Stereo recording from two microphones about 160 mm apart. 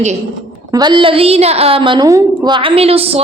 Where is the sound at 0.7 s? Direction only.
25° right (ahead or behind).